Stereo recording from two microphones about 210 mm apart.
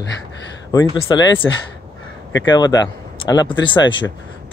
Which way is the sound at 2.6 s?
20° left (ahead or behind).